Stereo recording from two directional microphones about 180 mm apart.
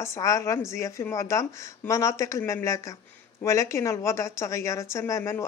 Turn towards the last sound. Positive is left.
turn(degrees=15)  # may be behind; listen again after turning